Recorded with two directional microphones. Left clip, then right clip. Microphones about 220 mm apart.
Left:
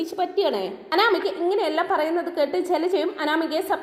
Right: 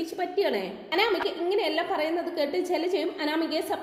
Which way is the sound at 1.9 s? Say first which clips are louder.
Left 5 dB; 35° left (ahead or behind).